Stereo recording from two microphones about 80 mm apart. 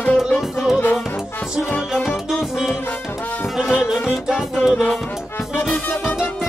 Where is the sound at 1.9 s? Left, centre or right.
Centre.